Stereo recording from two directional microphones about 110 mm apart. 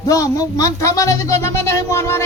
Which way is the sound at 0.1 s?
30° left (ahead or behind).